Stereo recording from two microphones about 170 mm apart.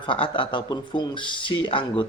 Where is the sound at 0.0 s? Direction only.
30° left (ahead or behind).